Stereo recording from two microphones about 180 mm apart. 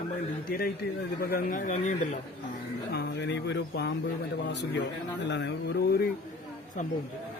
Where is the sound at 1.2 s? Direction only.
50° left (ahead or behind).